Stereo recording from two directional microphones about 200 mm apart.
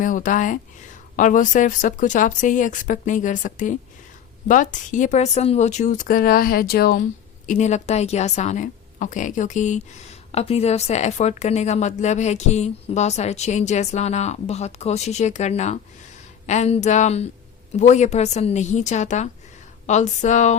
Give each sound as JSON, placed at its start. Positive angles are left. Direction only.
{"t": 0.0, "sound": "a woman's voice", "side_deg": 40}
{"t": 7.4, "sound": "a woman's voice", "side_deg": 35}